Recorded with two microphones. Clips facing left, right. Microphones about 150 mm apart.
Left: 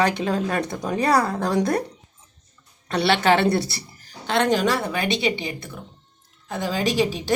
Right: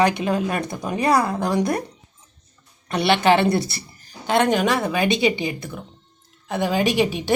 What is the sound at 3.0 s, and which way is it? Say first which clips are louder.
Speech: right 2 dB; 15° right (ahead or behind).